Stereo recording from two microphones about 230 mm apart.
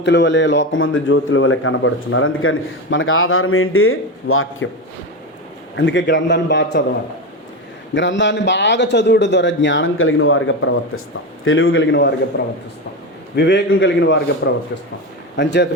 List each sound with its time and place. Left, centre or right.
0.0 s a man's voice: left
5.7 s a man's voice: left
7.9 s a man's voice: left